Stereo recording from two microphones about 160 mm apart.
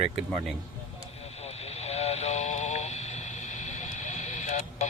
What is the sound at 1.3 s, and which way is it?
Radio, 40° left (ahead or behind).